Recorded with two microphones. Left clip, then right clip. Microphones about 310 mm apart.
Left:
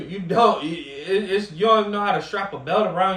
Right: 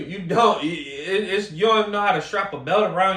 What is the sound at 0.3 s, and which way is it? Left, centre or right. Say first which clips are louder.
Speech: even; centre.